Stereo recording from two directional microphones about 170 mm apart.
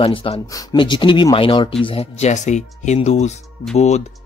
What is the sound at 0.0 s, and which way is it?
Speech, 35° left (ahead or behind).